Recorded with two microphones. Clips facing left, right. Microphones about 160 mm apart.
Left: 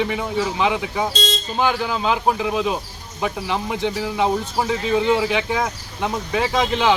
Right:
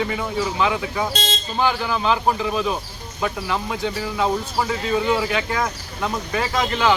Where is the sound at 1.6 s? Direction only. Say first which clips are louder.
Even; 15° left (ahead or behind).